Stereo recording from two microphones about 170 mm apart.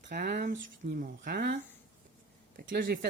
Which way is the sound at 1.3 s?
80° right.